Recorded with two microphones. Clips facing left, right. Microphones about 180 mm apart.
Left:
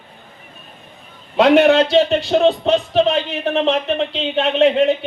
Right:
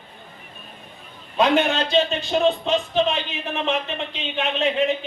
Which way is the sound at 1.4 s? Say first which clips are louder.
Left 8 dB; 75° left (ahead or behind).